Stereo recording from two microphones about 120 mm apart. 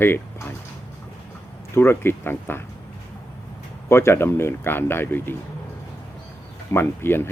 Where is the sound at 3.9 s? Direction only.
20° left (ahead or behind).